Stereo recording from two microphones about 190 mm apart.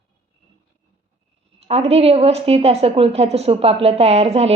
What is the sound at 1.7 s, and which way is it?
A woman's voice, 30° right (ahead or behind).